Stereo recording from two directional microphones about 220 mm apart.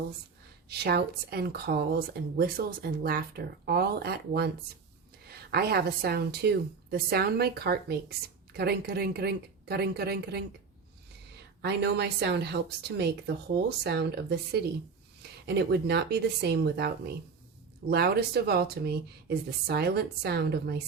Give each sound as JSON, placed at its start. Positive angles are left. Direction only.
{"t": 0.7, "sound": "speech", "side_deg": -45}
{"t": 11.6, "sound": "speech", "side_deg": -50}